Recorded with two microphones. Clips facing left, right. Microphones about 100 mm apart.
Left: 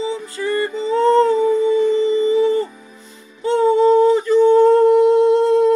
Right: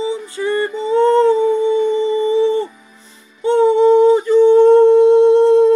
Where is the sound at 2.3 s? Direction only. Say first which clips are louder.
Right 3 dB; 25° right (ahead or behind).